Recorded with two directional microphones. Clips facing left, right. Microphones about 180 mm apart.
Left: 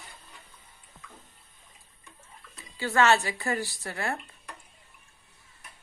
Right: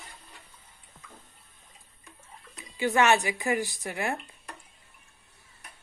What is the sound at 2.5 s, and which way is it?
Speech, 15° right (ahead or behind).